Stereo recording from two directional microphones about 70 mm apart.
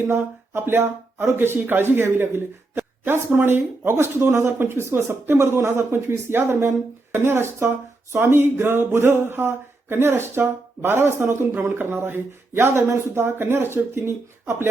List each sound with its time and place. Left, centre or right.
0.1 s speech: right